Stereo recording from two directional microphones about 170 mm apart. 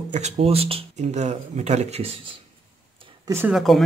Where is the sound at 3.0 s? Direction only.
20° right (ahead or behind).